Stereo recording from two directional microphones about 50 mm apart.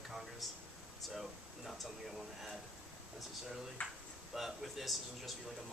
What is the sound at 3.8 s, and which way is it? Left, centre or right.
Speech, left.